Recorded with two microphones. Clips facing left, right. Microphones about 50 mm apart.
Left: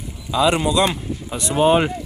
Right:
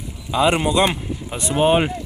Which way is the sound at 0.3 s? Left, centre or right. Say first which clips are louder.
Even; right.